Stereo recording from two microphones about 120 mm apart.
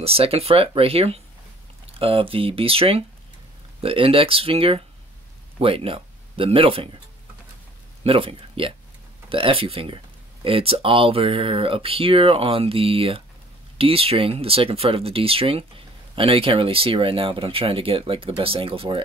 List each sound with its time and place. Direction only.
0.0 s speech: 55° right (ahead or behind)
8.0 s speech: 50° right (ahead or behind)